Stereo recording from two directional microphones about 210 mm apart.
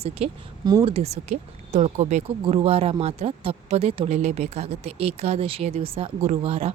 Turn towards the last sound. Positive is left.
turn(degrees=-30)  # may be behind; listen again after turning